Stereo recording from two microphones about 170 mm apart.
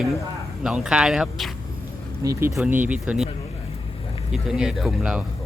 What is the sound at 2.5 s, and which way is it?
Speech, 5° right (ahead or behind).